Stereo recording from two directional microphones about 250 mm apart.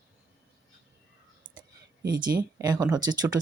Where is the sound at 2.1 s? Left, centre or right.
Centre.